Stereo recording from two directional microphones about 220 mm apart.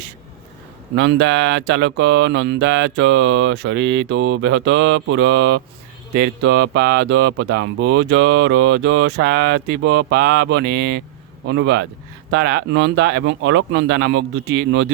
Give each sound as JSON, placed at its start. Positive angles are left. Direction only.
{"t": 0.9, "sound": "mantra", "side_deg": -50}
{"t": 9.2, "sound": "mantra", "side_deg": -45}